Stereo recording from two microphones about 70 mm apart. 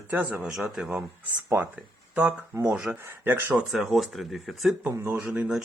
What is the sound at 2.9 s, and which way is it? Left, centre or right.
Speech, centre.